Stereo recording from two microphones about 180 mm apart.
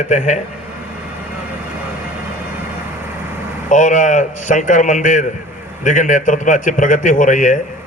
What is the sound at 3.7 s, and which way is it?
A man's voice, 45° left (ahead or behind).